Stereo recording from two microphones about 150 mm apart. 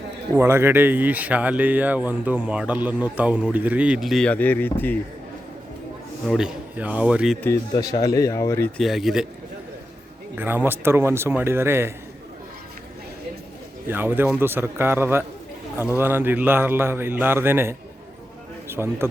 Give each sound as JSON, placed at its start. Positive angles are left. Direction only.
{"t": 0.3, "sound": "speech", "side_deg": -15}
{"t": 6.2, "sound": "speech", "side_deg": -5}
{"t": 7.7, "sound": "speech", "side_deg": 25}
{"t": 8.8, "sound": "speech", "side_deg": 0}
{"t": 10.3, "sound": "speech", "side_deg": -15}
{"t": 13.8, "sound": "speech", "side_deg": -15}